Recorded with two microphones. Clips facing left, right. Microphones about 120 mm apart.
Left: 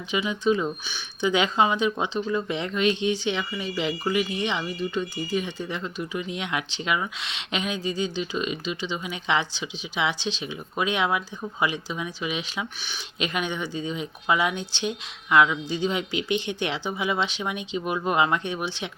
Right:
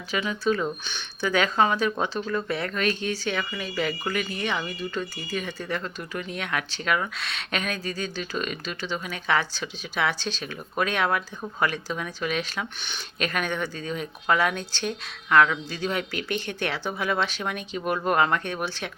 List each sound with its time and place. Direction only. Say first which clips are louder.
0.1 s speech: left 2 dB; 20° left (ahead or behind)
0.9 s speech: left 3 dB; 10° left (ahead or behind)